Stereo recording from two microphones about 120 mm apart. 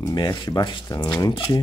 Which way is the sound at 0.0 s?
35° left (ahead or behind).